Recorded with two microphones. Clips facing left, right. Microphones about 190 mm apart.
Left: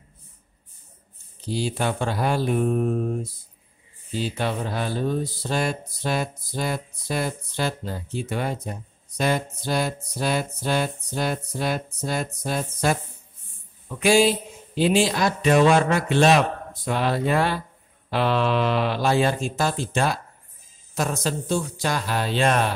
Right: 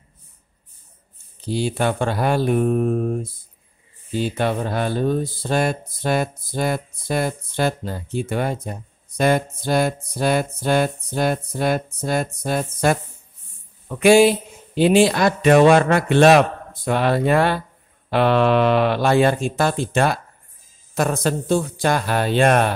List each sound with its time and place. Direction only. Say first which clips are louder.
1.5 s a man's voice: right 4 dB; 60° right (ahead or behind)